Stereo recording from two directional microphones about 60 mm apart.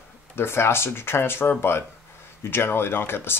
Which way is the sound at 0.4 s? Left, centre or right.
Left.